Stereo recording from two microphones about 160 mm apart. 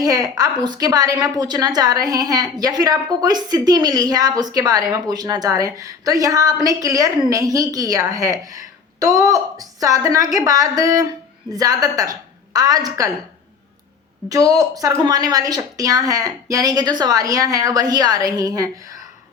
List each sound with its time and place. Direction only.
0.0 s a woman's voice: 25° right (ahead or behind)
14.3 s a woman's voice: 20° right (ahead or behind)